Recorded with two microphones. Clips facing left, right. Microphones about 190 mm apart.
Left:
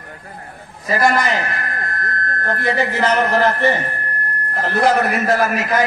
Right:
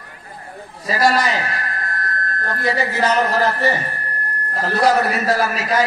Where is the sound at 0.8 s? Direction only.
55° left (ahead or behind).